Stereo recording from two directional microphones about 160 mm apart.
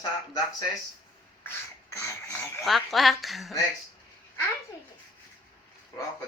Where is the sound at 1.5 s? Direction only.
15° left (ahead or behind).